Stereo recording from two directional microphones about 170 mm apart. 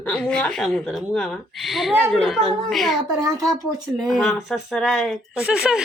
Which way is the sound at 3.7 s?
Centre (ahead or behind).